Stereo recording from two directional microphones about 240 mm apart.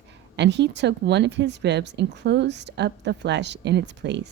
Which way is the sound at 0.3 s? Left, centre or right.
Right.